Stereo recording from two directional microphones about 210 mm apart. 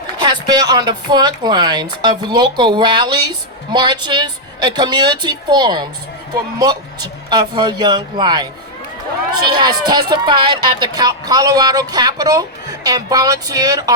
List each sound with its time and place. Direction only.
0.2 s speech: 20° right (ahead or behind)
9.5 s speech: 20° right (ahead or behind)